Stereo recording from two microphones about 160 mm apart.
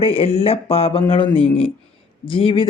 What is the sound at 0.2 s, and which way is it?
Speech, 35° left (ahead or behind).